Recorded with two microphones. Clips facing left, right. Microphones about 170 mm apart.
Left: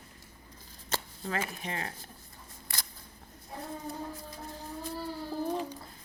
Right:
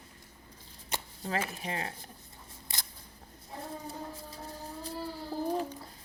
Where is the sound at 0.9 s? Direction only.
15° right (ahead or behind).